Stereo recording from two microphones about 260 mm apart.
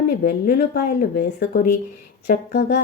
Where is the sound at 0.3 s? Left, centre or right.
Left.